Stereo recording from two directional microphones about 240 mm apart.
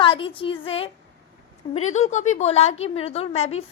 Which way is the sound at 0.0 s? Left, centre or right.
Left.